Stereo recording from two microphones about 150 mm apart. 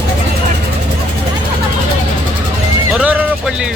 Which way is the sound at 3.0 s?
10° right (ahead or behind).